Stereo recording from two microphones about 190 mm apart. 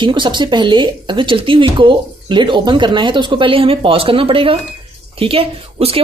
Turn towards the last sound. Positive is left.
turn(degrees=-30)  # may be behind; listen again after turning